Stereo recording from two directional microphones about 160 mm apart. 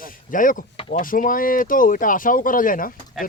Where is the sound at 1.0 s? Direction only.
60° left (ahead or behind).